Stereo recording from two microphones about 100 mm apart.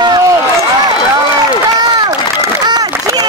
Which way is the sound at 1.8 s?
40° right (ahead or behind).